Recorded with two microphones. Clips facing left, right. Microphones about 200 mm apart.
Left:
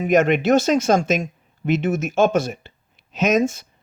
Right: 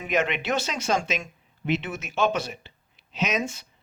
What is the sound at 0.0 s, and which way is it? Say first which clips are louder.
Speech: left 9 dB; 45° left (ahead or behind).